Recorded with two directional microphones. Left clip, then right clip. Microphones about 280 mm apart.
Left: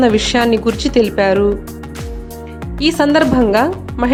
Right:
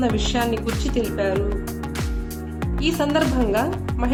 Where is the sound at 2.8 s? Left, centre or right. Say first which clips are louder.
Left 9 dB; left.